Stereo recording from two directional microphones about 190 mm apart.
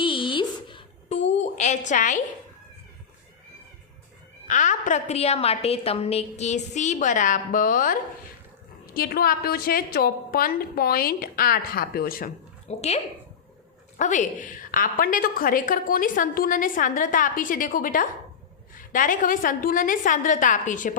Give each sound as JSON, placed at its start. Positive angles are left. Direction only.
{"t": 0.0, "sound": "a sound", "side_deg": 25}
{"t": 1.9, "sound": "a woman's voice", "side_deg": 40}
{"t": 4.4, "sound": "a woman's voice", "side_deg": 40}
{"t": 9.0, "sound": "a woman's voice", "side_deg": 50}
{"t": 12.6, "sound": "speech", "side_deg": 35}
{"t": 14.0, "sound": "a woman's voice", "side_deg": 40}